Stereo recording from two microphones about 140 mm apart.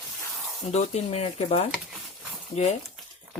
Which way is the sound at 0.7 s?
50° left (ahead or behind).